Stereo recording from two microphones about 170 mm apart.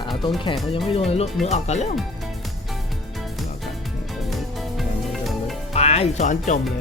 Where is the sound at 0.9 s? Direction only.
35° left (ahead or behind).